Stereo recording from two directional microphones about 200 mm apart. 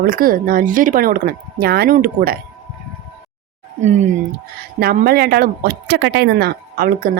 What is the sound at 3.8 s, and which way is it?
Speech, 35° right (ahead or behind).